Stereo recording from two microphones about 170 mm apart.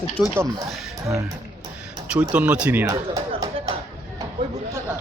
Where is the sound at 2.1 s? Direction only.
5° right (ahead or behind).